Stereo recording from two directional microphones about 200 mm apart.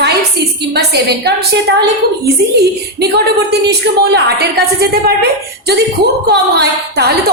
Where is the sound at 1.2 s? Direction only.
55° right (ahead or behind).